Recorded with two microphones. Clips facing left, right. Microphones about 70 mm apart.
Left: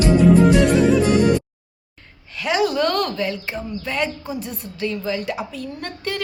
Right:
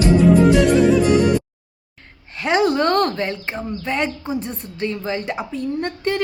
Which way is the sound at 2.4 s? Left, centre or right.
Right.